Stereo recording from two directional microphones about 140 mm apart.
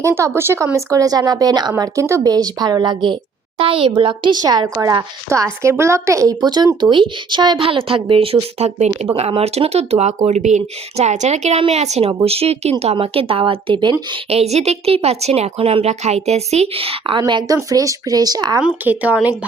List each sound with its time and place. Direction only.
0.0 s a woman's voice: 20° right (ahead or behind)
18.9 s speech: 10° right (ahead or behind)